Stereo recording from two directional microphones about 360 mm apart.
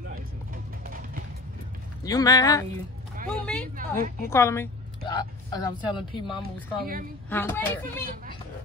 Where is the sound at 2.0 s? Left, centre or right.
Centre.